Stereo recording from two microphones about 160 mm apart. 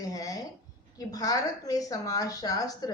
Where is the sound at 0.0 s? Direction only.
25° left (ahead or behind).